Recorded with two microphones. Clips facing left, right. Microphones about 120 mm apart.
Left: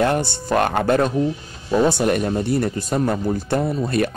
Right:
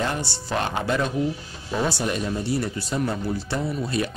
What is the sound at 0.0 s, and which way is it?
Speech, 55° left (ahead or behind).